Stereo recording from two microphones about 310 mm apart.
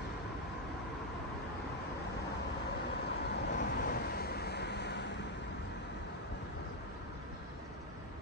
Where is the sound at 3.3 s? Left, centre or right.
Left.